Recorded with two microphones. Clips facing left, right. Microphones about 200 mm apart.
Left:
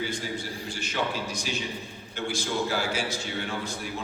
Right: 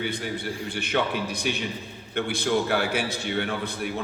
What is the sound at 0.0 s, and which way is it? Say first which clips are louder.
A man's voice: right 3 dB; 60° right (ahead or behind).